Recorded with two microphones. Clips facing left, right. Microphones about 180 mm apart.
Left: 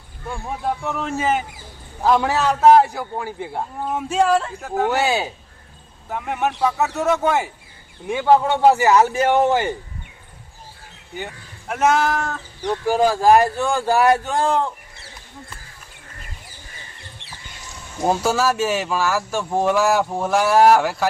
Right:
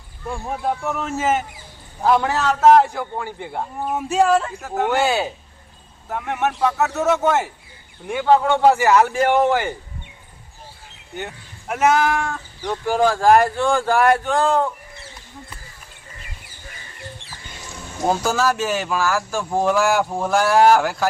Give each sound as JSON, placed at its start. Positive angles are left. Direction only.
{"t": 0.9, "sound": "speech", "side_deg": 0}
{"t": 3.8, "sound": "speech", "side_deg": -10}
{"t": 11.7, "sound": "speech", "side_deg": -5}
{"t": 12.6, "sound": "speech", "side_deg": 15}
{"t": 18.0, "sound": "speech", "side_deg": 5}